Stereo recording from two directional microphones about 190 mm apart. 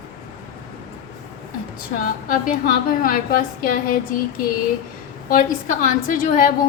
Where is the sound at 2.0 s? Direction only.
45° left (ahead or behind).